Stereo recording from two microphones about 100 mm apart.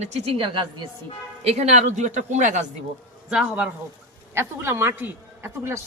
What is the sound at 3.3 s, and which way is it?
Speech, 10° right (ahead or behind).